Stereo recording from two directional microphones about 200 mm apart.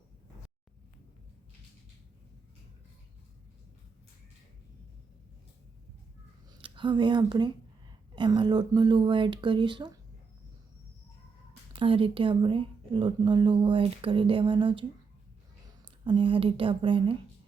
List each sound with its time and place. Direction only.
6.6 s speech: 25° right (ahead or behind)
11.7 s speech: 25° right (ahead or behind)
16.0 s speech: 25° right (ahead or behind)